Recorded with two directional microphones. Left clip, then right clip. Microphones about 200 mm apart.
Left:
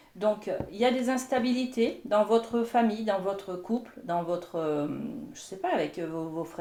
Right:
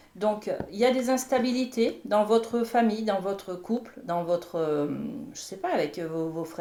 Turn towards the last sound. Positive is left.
turn(degrees=-30)  # may be behind; listen again after turning